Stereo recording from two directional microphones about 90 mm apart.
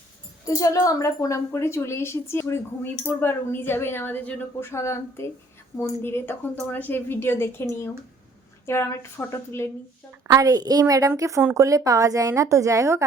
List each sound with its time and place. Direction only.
0.4 s a woman's voice: 40° left (ahead or behind); by 4.4 s 20° left (ahead or behind)
4.6 s a woman's voice: 30° left (ahead or behind)
10.2 s a woman's voice: 45° right (ahead or behind)